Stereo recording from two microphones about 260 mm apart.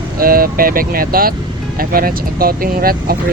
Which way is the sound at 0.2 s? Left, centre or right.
Right.